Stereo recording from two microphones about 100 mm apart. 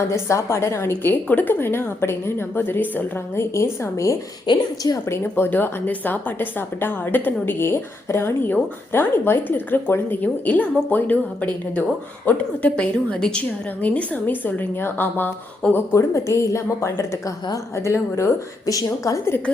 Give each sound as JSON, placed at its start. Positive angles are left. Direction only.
{"t": 0.1, "sound": "a woman's voice", "side_deg": 30}
{"t": 5.0, "sound": "a woman's voice", "side_deg": 25}
{"t": 12.2, "sound": "a woman's voice", "side_deg": 15}